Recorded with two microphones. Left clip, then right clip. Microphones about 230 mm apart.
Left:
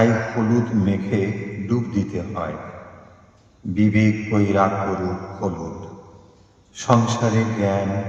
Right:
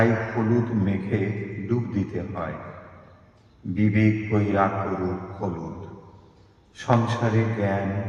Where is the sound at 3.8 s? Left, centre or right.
Left.